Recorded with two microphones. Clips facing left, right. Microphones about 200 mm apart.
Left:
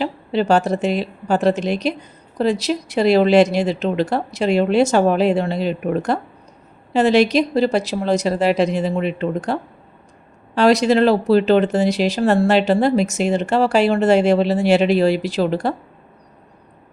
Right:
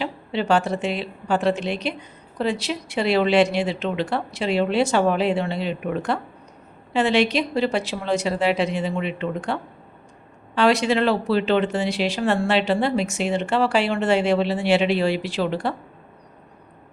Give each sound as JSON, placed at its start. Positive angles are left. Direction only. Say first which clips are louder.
{"t": 0.0, "sound": "a woman's voice", "louder": "left 6 dB", "side_deg": 40}